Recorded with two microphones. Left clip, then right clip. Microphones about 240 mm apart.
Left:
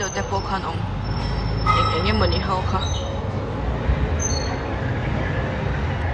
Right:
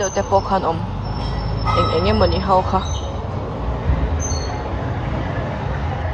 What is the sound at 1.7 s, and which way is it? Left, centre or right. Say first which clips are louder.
Speech: right 8 dB; centre.